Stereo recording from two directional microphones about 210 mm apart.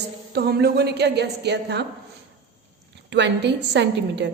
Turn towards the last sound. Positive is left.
turn(degrees=-55)  # may be behind; listen again after turning